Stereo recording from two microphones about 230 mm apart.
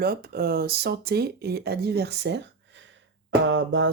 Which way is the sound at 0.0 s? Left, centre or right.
Right.